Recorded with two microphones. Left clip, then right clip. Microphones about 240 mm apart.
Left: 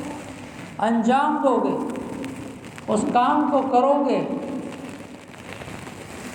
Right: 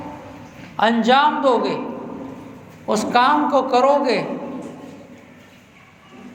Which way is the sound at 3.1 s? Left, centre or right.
Right.